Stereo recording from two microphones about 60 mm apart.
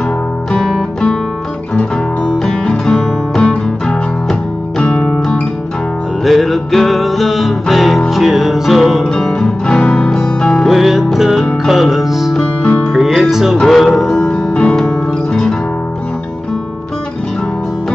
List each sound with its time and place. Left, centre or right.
2.3 s music: centre
6.2 s music: centre
9.3 s music: centre
10.7 s music: centre
14.1 s music: centre